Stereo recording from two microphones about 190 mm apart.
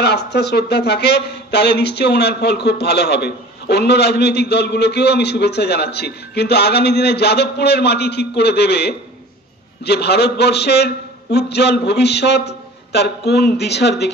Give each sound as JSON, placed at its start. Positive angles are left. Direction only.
{"t": 0.0, "sound": "speech", "side_deg": 60}